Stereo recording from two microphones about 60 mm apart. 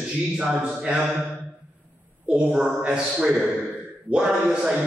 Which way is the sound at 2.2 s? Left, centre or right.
Centre.